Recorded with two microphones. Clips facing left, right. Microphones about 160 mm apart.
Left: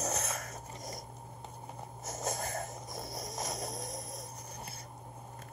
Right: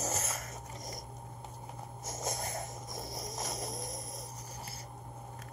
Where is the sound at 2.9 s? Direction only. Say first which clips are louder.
Even; 55° left (ahead or behind).